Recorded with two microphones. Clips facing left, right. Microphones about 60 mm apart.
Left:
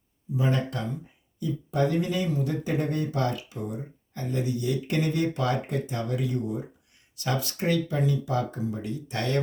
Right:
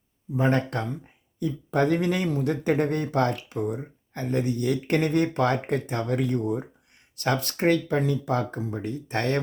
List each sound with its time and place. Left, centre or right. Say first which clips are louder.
0.3 s speech: right 4 dB; right